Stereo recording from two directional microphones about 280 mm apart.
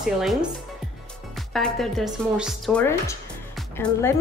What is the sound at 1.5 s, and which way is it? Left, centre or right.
Speech, centre.